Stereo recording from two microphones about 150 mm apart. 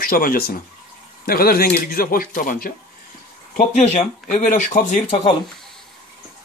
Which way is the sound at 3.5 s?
50° left (ahead or behind).